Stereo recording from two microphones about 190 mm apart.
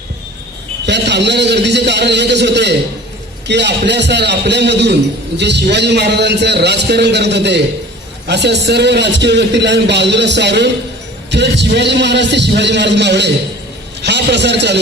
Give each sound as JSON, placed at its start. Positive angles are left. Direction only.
{"t": 0.9, "sound": "a man's voice", "side_deg": -65}